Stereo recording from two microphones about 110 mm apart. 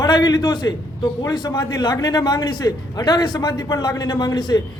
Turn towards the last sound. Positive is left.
turn(degrees=40)  # may be behind; listen again after turning